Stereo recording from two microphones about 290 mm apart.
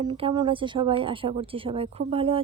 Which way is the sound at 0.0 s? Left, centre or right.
Centre.